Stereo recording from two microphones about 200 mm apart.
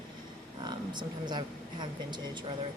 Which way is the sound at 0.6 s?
20° right (ahead or behind).